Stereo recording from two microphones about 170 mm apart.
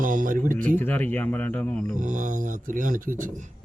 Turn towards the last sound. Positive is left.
turn(degrees=-50)  # may be behind; listen again after turning